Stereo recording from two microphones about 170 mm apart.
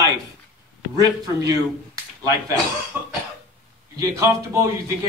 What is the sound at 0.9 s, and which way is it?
Speech, 20° right (ahead or behind).